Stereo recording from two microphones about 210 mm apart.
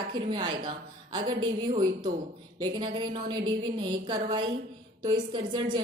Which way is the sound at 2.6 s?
20° right (ahead or behind).